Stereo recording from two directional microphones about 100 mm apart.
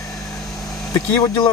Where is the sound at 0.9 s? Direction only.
40° left (ahead or behind).